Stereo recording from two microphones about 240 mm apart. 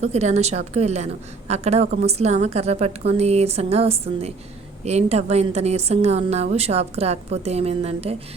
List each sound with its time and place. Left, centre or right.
0.0 s a woman's voice: right